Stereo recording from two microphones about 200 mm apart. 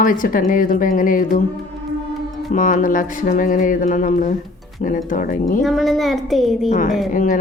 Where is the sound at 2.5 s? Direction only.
40° left (ahead or behind).